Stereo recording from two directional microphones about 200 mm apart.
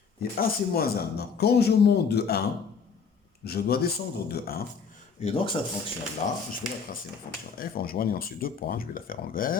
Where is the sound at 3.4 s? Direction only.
50° left (ahead or behind).